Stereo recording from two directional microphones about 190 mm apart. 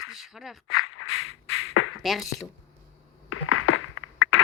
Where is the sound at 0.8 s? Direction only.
90° left.